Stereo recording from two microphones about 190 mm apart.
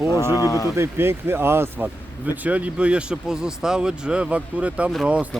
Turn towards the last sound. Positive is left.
turn(degrees=-5)  # may be behind; listen again after turning